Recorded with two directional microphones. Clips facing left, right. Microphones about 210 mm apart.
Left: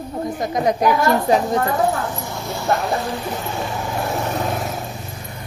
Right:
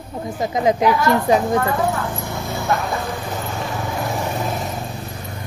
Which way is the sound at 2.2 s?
60° right (ahead or behind).